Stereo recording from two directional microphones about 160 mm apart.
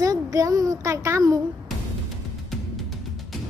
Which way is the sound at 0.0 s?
20° right (ahead or behind).